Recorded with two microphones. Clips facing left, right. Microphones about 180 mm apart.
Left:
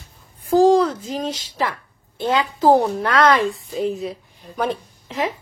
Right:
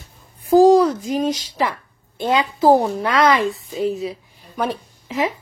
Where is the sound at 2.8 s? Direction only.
Centre (ahead or behind).